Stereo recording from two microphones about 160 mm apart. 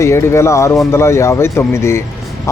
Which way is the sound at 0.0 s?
15° left (ahead or behind).